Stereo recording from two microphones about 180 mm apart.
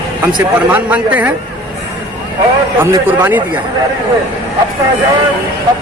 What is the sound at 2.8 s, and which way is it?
Speech, 10° right (ahead or behind).